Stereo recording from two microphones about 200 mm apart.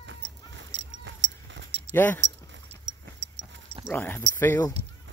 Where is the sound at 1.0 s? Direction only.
65° right (ahead or behind).